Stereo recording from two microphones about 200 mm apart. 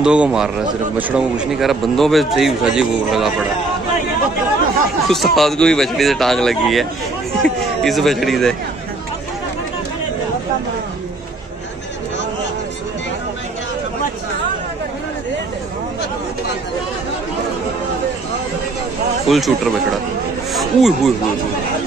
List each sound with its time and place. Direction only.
0.0 s a man's voice: 5° right (ahead or behind)
5.0 s a man's voice: centre (ahead or behind)
19.2 s a man's voice: centre (ahead or behind)